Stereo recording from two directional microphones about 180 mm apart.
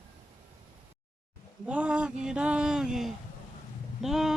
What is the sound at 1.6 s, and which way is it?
Speech, 5° right (ahead or behind).